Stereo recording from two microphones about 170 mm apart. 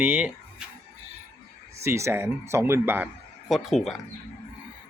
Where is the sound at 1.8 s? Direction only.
15° right (ahead or behind).